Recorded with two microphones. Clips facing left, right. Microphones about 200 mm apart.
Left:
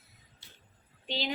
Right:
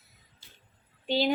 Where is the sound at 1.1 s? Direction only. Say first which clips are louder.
Right 9 dB; 50° right (ahead or behind).